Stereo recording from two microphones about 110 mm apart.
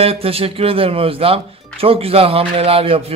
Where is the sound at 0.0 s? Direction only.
60° right (ahead or behind).